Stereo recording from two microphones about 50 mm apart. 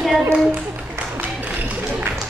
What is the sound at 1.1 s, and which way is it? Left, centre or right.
Music, right.